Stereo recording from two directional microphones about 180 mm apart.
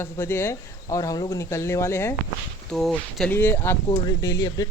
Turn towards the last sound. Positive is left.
turn(degrees=20)  # may be behind; listen again after turning